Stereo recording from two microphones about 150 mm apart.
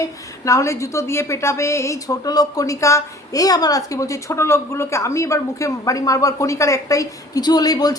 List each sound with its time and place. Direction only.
0.4 s a woman's voice: 20° left (ahead or behind)